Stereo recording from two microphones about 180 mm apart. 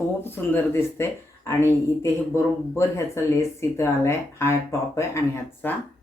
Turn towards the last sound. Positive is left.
turn(degrees=15)  # may be behind; listen again after turning